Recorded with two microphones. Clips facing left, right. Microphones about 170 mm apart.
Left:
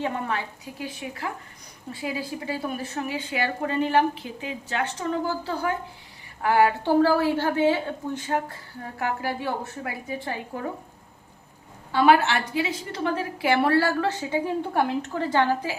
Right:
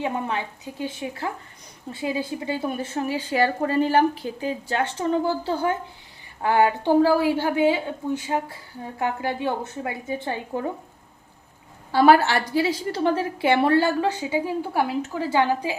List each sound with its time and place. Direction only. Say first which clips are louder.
0.0 s a woman's voice: right 2 dB; 20° right (ahead or behind)
11.9 s a woman's voice: right 3 dB; 35° right (ahead or behind); by 15.8 s 15° right (ahead or behind)